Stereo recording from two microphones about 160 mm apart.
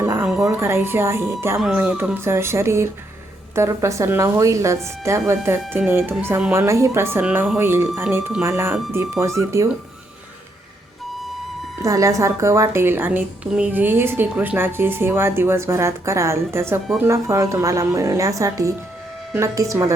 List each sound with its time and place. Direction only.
0.0 s music: 15° right (ahead or behind)
0.4 s speech: 15° right (ahead or behind)
1.5 s a woman's voice: 5° right (ahead or behind)
11.8 s a woman's voice: 20° right (ahead or behind)